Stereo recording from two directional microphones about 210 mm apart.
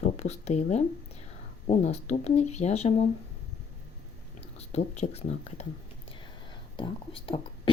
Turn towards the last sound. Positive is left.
turn(degrees=25)  # may be behind; listen again after turning